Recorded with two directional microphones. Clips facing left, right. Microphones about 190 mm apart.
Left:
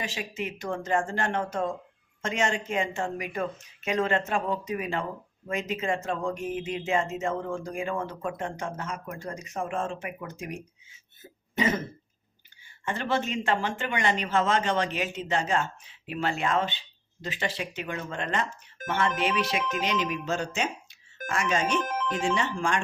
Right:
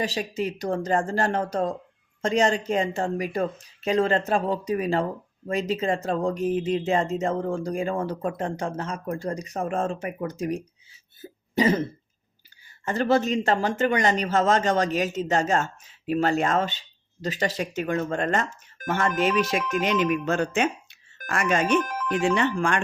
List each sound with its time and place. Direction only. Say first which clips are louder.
0.0 s speech: right 7 dB; 35° right (ahead or behind)
11.2 s cough: right 6 dB; 30° right (ahead or behind)
12.8 s speech: right 7 dB; 40° right (ahead or behind); by 21.8 s 55° right (ahead or behind)
21.8 s music: left 1 dB; 25° left (ahead or behind)
22.4 s speech: right 4 dB; 60° right (ahead or behind)